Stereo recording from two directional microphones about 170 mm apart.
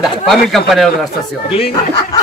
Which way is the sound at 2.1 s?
20° left (ahead or behind).